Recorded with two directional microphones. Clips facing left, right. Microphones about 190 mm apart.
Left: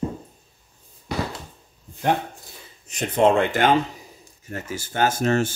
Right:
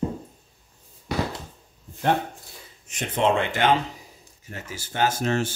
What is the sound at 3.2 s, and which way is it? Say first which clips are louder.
Speech: left 4 dB; 40° left (ahead or behind).